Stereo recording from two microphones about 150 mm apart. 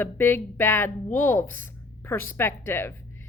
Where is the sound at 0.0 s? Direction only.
15° left (ahead or behind).